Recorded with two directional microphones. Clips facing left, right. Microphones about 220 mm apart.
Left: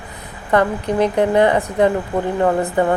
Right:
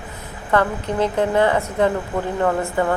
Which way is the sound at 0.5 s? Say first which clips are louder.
Left 3 dB; 15° left (ahead or behind).